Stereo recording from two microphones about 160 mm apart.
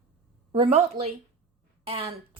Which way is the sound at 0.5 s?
40° right (ahead or behind).